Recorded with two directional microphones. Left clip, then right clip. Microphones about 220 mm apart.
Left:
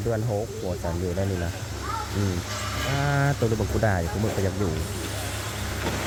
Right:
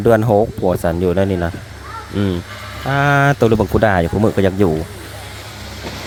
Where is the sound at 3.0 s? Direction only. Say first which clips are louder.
Right 14 dB; 40° right (ahead or behind).